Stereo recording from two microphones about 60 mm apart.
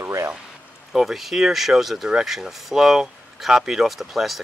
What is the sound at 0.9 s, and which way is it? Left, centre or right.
Speech, centre.